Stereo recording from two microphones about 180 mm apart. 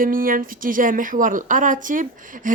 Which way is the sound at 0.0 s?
50° right (ahead or behind).